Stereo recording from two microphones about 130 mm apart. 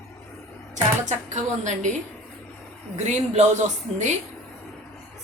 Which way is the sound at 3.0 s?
60° right (ahead or behind).